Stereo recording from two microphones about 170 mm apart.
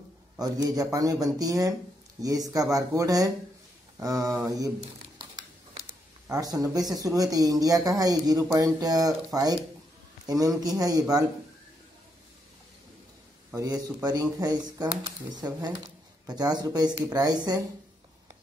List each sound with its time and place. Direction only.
0.4 s speech: 20° right (ahead or behind)
6.2 s speech: 20° right (ahead or behind)
13.6 s speech: 20° right (ahead or behind)